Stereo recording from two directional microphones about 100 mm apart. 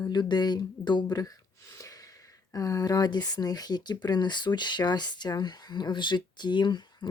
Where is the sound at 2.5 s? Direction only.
35° left (ahead or behind).